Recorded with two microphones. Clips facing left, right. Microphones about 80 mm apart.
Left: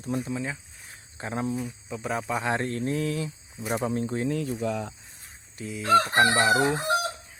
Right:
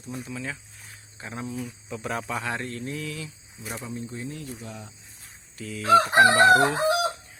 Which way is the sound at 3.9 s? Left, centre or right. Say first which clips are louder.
Left 7 dB; left.